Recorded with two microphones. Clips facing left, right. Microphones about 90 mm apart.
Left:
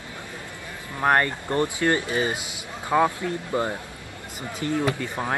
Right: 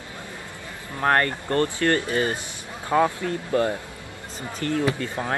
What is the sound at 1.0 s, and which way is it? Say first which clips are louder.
A man's voice: even; 15° left (ahead or behind).